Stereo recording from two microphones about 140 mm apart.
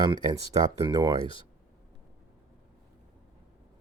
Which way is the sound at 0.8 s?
30° right (ahead or behind).